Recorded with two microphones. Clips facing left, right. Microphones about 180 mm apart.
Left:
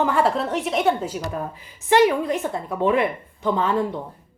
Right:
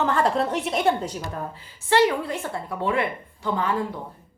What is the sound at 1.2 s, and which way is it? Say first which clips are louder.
Speech: left 4 dB; 15° left (ahead or behind).